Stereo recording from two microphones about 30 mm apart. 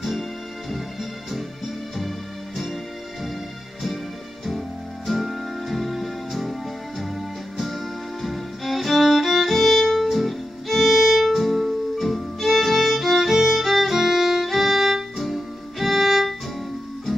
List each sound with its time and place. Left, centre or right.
2.0 s music: centre
4.6 s music: centre
7.6 s music: centre
10.0 s music: centre
13.6 s violin: centre